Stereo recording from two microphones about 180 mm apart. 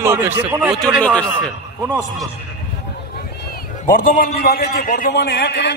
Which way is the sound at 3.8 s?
50° left (ahead or behind).